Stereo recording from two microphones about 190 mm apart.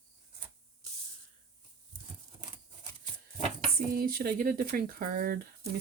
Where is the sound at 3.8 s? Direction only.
50° right (ahead or behind).